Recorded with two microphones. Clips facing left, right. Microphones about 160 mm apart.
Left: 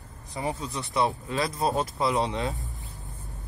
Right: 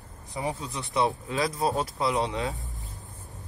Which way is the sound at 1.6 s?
Centre (ahead or behind).